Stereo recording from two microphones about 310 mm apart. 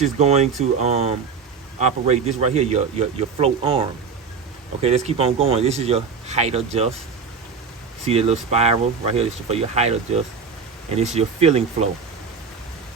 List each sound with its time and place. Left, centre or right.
0.0 s speech: right
4.8 s speech: centre
8.0 s speech: centre